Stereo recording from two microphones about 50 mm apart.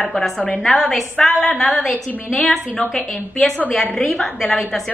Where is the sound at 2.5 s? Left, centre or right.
Left.